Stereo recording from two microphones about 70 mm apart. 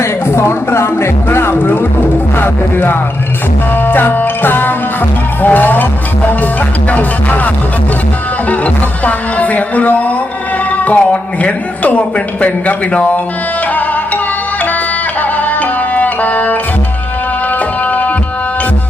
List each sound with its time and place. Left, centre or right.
0.0 s speech: left
2.4 s music: left
3.8 s speech: left
6.9 s speech: left
15.2 s music: left
17.8 s tabla: left